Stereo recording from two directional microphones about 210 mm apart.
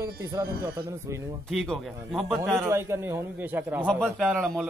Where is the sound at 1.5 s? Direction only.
Centre (ahead or behind).